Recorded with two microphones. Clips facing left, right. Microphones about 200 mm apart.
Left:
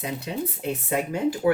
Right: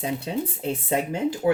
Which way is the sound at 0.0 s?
30° right (ahead or behind).